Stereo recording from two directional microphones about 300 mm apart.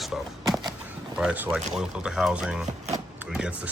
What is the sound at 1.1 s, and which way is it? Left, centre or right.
Speech, centre.